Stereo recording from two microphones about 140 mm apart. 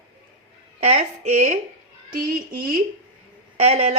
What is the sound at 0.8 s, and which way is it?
Speech, 55° right (ahead or behind).